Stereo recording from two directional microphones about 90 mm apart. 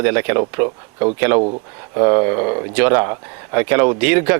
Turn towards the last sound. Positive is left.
turn(degrees=-15)  # may be behind; listen again after turning